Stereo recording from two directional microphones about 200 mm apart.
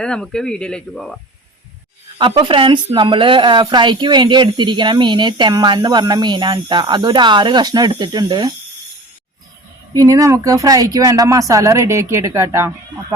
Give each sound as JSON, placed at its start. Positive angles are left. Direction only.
{"t": 0.0, "sound": "speech", "side_deg": 5}
{"t": 2.1, "sound": "a woman's voice", "side_deg": -25}
{"t": 9.9, "sound": "speech", "side_deg": -15}